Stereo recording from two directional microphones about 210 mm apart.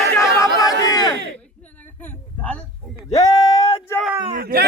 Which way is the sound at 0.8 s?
15° left (ahead or behind).